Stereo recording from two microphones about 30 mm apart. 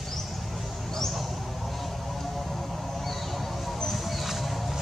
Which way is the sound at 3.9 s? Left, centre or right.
Centre.